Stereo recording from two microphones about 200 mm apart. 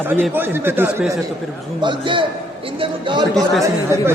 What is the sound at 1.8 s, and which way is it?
A man's voice, 25° right (ahead or behind).